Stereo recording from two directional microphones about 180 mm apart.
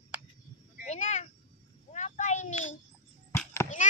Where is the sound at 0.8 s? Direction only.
40° left (ahead or behind).